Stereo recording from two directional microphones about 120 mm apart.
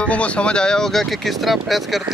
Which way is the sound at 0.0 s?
10° left (ahead or behind).